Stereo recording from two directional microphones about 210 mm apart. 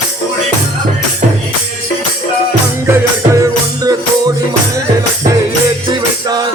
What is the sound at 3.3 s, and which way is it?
Music, 15° right (ahead or behind).